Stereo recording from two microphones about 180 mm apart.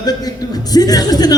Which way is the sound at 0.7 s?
20° left (ahead or behind).